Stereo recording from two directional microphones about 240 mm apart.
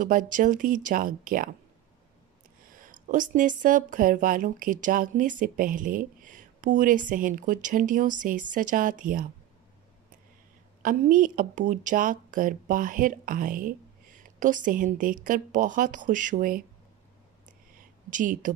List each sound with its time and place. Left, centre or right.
0.0 s speech: right
2.8 s speech: right
10.8 s speech: right
18.1 s speech: right